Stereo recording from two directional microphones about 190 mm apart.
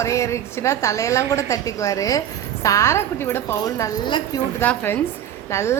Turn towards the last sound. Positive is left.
turn(degrees=15)  # may be behind; listen again after turning